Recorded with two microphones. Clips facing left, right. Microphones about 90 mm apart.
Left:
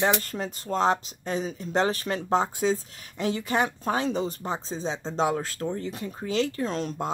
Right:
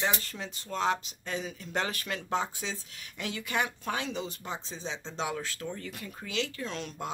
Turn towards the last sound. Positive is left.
turn(degrees=40)  # may be behind; listen again after turning